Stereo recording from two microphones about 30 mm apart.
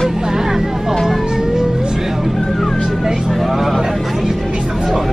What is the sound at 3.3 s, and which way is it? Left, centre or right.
Speech, centre.